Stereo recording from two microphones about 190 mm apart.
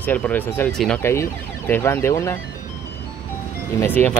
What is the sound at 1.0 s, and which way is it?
Speech, 15° left (ahead or behind).